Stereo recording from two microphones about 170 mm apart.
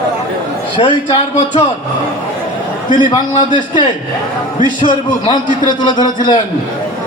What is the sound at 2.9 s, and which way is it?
Speech, 25° left (ahead or behind).